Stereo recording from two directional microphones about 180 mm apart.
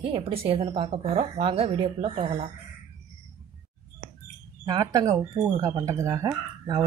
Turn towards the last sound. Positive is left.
turn(degrees=-20)  # may be behind; listen again after turning